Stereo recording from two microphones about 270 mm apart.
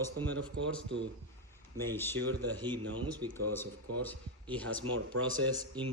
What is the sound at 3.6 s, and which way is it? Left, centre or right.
Speech, centre.